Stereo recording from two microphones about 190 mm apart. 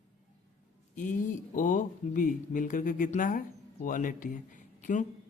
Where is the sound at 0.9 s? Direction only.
40° left (ahead or behind).